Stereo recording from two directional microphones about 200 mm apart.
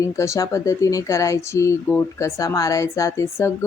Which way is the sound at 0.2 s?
15° left (ahead or behind).